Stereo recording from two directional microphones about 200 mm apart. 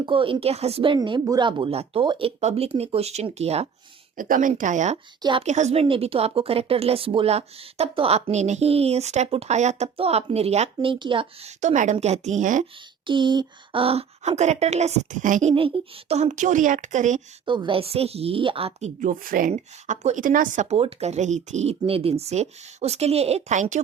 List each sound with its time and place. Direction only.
0.0 s speech: 25° right (ahead or behind)
4.2 s a woman's voice: 40° right (ahead or behind)
13.1 s a woman's voice: 25° right (ahead or behind)
17.4 s speech: 25° right (ahead or behind)
18.9 s a woman's voice: 40° right (ahead or behind)